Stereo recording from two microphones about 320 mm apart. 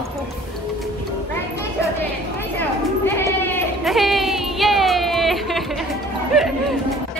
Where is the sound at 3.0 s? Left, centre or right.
Centre.